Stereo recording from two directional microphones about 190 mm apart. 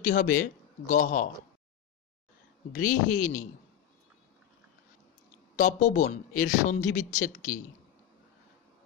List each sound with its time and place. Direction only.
0.0 s speech: 45° left (ahead or behind)
2.7 s speech: 45° left (ahead or behind)
5.6 s speech: 40° left (ahead or behind)